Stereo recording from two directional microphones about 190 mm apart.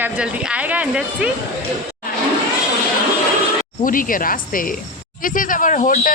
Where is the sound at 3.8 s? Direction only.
45° left (ahead or behind).